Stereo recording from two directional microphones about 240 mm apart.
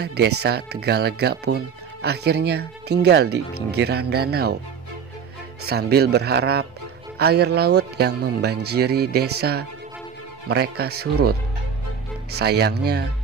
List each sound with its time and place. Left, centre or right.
0.0 s speech: right
5.7 s speech: right